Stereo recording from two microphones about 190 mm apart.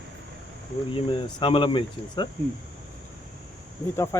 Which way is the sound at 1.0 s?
25° left (ahead or behind).